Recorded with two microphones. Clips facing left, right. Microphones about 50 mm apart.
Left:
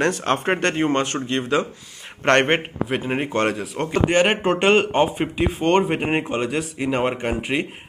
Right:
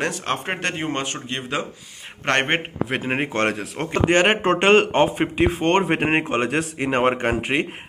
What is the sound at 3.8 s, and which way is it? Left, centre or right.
Speech, right.